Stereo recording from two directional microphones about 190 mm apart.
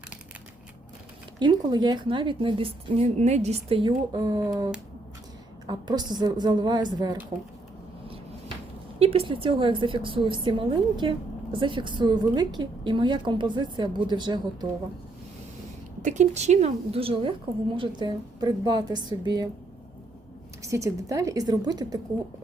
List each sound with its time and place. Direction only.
1.4 s a woman's voice: 25° right (ahead or behind)
9.0 s a woman's voice: 30° right (ahead or behind)
16.0 s a woman's voice: 40° right (ahead or behind); by 19.5 s 20° right (ahead or behind)
20.6 s a woman's voice: 15° right (ahead or behind)